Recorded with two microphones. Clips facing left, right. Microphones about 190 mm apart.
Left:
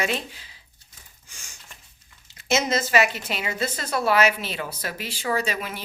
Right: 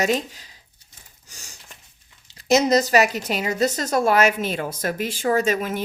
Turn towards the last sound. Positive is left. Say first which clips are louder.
# right 6 dB
turn(degrees=-45)  # may be behind; listen again after turning